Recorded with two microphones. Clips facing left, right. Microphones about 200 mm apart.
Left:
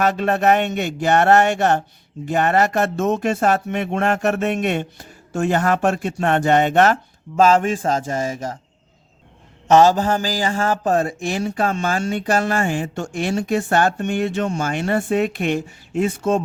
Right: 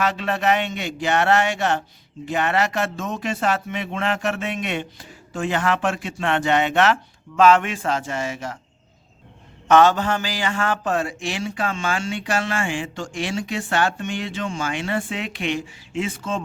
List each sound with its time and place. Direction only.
0.0 s a man's voice: 45° left (ahead or behind)
9.6 s a man's voice: 35° left (ahead or behind)